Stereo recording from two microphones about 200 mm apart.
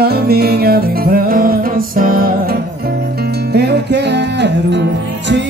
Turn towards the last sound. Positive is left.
turn(degrees=-60)  # may be behind; listen again after turning